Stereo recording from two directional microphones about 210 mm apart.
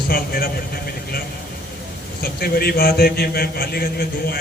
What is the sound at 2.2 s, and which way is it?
Speech, 45° left (ahead or behind).